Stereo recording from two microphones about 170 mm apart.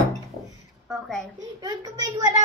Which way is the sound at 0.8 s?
Centre (ahead or behind).